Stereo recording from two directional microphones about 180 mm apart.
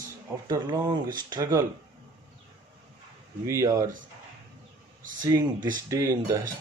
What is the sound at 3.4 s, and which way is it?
Speech, 15° right (ahead or behind).